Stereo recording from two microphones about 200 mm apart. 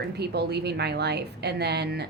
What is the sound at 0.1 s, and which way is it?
A woman's voice, 55° right (ahead or behind).